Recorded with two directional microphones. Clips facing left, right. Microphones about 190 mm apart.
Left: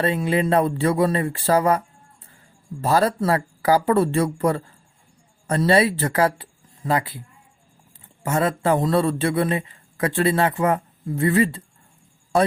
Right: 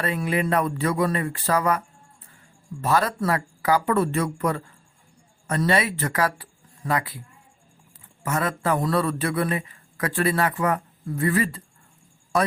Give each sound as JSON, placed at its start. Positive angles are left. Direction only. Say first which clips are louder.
{"t": 0.0, "sound": "a man's voice", "louder": "left 4 dB", "side_deg": 30}
{"t": 2.8, "sound": "speech", "louder": "left 3 dB", "side_deg": 30}
{"t": 8.2, "sound": "a man's voice", "louder": "left 4 dB", "side_deg": 30}